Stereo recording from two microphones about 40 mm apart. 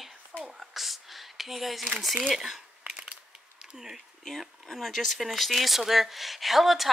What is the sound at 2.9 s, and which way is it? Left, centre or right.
Crushing, right.